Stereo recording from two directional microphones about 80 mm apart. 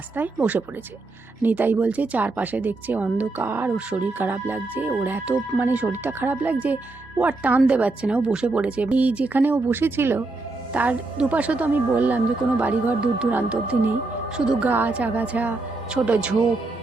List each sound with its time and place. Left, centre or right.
0.2 s speech: right
1.4 s speech: right
3.8 s speech: centre
10.7 s speech: centre
14.7 s speech: right